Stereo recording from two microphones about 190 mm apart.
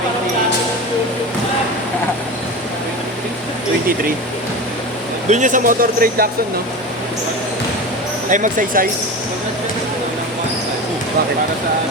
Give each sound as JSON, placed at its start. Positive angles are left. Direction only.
{"t": 5.3, "sound": "speech", "side_deg": -40}
{"t": 8.3, "sound": "speech", "side_deg": -45}